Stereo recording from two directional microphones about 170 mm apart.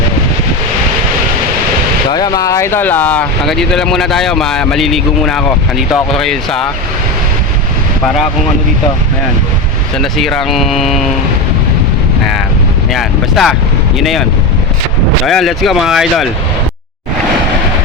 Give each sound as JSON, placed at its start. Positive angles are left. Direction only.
{"t": 2.0, "sound": "speech", "side_deg": 25}
{"t": 10.0, "sound": "speech", "side_deg": 0}
{"t": 12.9, "sound": "speech", "side_deg": 0}
{"t": 15.3, "sound": "speech", "side_deg": 0}